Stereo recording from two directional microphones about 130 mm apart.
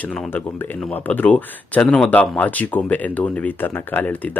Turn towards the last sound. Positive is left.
turn(degrees=10)  # may be behind; listen again after turning